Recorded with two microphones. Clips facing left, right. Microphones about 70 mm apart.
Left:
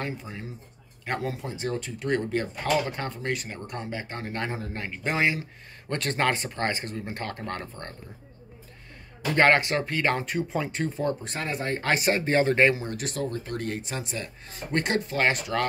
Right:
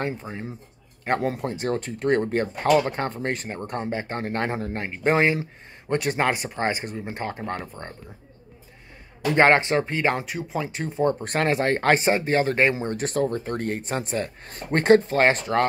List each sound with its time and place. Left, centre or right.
0.0 s speech: right
1.0 s speech: right
5.9 s speech: centre
9.3 s speech: right
10.1 s speech: centre
10.9 s speech: right
11.1 s speech: right
11.8 s speech: right
12.3 s speech: centre
12.8 s speech: right